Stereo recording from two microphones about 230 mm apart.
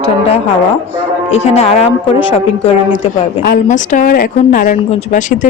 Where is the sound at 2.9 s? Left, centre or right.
Left.